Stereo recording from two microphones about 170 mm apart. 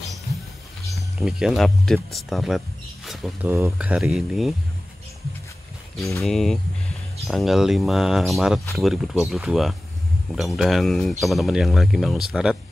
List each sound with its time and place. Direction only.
0.9 s speech: centre (ahead or behind)
3.4 s speech: 15° right (ahead or behind)
3.7 s speech: 5° right (ahead or behind)
5.9 s speech: 20° left (ahead or behind)
6.2 s speech: centre (ahead or behind)